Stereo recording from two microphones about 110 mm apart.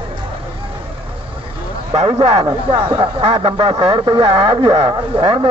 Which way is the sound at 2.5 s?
45° right (ahead or behind).